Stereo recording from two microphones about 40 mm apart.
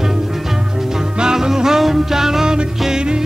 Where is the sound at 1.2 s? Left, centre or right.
Centre.